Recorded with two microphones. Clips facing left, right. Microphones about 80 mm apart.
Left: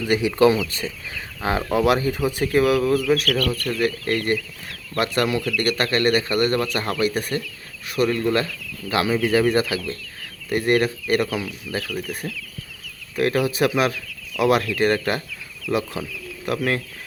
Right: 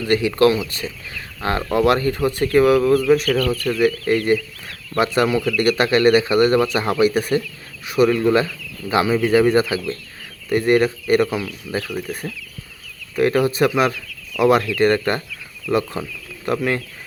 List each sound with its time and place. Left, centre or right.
0.0 s speech: centre
1.4 s speech: centre
7.1 s speech: centre
11.9 s speech: right
13.1 s speech: centre